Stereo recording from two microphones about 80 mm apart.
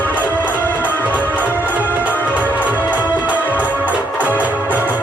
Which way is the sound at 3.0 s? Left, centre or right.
Left.